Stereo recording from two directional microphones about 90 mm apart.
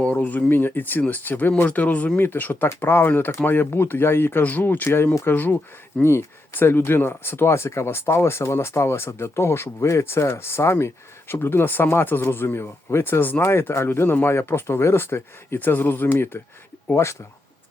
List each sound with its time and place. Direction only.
0.0 s speech: 15° left (ahead or behind); by 17.2 s 30° left (ahead or behind)